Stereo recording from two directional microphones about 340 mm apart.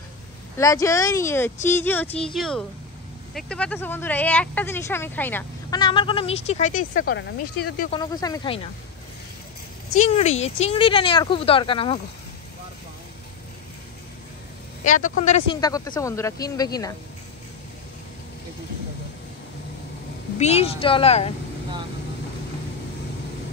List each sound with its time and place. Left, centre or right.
0.6 s speech: centre; by 7.9 s left
7.9 s speech: centre
9.9 s speech: centre
14.9 s speech: left
20.3 s speech: centre